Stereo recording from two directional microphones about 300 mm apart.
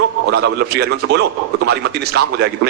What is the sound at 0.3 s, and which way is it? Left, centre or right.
A man's voice, right.